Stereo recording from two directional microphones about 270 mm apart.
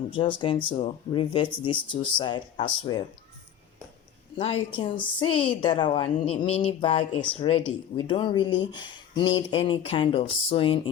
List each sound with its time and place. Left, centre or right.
0.1 s speech: centre
4.4 s speech: left